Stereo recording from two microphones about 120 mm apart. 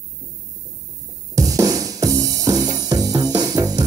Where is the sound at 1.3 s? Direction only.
30° right (ahead or behind).